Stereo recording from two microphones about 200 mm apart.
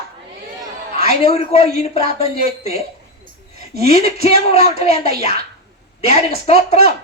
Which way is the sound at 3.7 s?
30° left (ahead or behind).